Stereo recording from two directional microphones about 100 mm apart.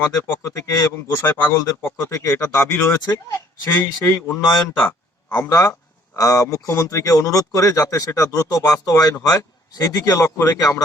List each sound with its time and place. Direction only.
0.0 s speech: 25° left (ahead or behind)